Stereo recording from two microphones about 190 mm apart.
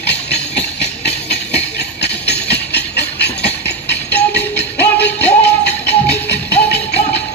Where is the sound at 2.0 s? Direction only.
60° left (ahead or behind).